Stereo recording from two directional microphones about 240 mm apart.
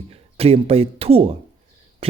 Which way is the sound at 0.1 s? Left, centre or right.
Right.